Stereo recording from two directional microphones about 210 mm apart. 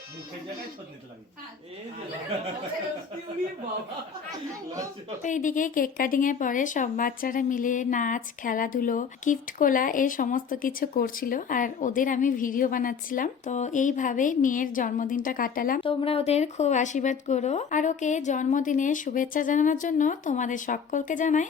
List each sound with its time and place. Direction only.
5.2 s speech: 35° left (ahead or behind)
15.8 s speech: 25° left (ahead or behind)